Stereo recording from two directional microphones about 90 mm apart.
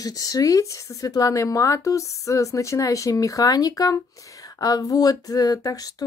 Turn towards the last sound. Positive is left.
turn(degrees=45)  # may be behind; listen again after turning